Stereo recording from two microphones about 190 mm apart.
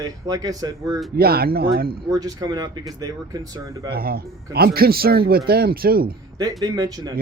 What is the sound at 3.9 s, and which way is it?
Speech, 50° right (ahead or behind).